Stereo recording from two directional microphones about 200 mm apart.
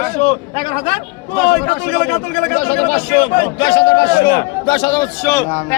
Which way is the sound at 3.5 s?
20° left (ahead or behind).